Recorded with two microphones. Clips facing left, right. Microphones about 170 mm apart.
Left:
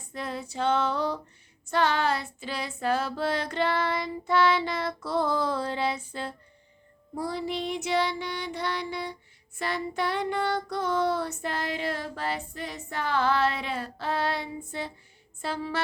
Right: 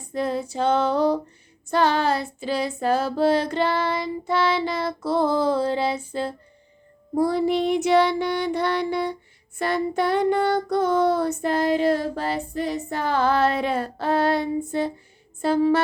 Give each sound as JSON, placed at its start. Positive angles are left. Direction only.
{"t": 0.1, "sound": "female singing", "side_deg": -35}
{"t": 7.1, "sound": "child singing", "side_deg": -55}